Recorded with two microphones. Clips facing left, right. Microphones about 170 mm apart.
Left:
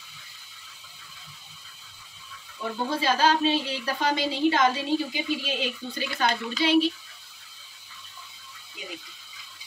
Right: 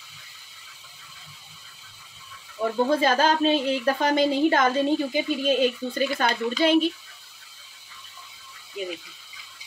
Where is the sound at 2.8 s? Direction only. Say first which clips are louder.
Right 1 dB; 50° right (ahead or behind).